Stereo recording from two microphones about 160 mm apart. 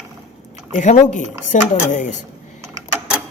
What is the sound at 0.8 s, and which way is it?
Speech, 50° left (ahead or behind).